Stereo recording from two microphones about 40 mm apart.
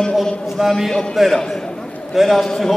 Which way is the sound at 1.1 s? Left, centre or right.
Centre.